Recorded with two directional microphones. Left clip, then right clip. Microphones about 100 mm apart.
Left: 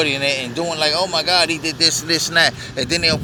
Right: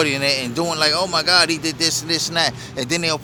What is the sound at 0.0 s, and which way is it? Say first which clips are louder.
Speech: left 1 dB; 65° right (ahead or behind).